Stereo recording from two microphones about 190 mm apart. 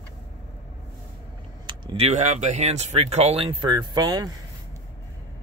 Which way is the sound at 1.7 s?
30° right (ahead or behind).